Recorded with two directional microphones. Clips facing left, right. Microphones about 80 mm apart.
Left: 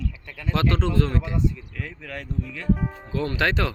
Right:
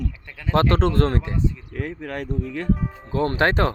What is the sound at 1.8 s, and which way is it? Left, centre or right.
Speech, right.